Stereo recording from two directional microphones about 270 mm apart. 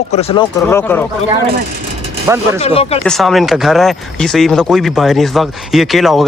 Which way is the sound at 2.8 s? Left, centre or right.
Left.